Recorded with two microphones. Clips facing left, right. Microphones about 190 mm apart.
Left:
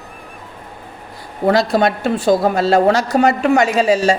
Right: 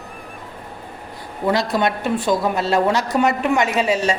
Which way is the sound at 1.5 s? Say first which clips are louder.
Left 5 dB; 35° left (ahead or behind).